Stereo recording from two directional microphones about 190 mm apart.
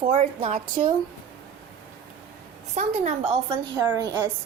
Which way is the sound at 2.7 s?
35° right (ahead or behind).